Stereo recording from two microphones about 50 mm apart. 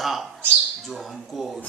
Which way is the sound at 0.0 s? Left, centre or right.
Centre.